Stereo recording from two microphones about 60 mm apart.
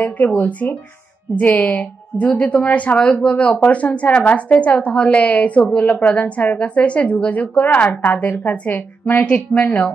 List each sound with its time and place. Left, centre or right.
0.0 s a woman's voice: left